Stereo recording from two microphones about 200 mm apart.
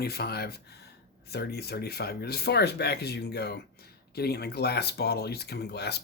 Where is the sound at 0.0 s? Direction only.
50° left (ahead or behind).